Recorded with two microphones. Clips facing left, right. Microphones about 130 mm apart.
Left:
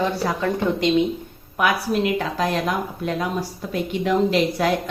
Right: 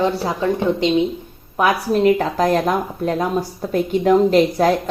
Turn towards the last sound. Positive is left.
turn(degrees=-40)  # may be behind; listen again after turning